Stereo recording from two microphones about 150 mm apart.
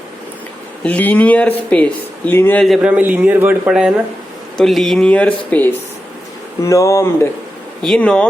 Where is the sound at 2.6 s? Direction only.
5° right (ahead or behind).